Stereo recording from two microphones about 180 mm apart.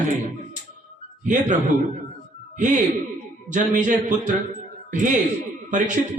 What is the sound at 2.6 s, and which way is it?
A woman's voice, 45° right (ahead or behind).